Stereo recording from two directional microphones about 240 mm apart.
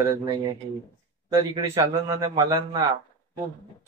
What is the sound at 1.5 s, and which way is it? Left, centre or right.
Speech, centre.